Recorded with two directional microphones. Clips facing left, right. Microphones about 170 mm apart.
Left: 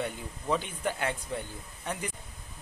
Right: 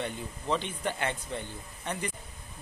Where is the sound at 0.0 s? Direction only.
5° left (ahead or behind).